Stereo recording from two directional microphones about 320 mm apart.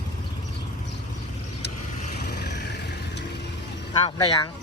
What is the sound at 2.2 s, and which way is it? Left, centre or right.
Vehicle, left.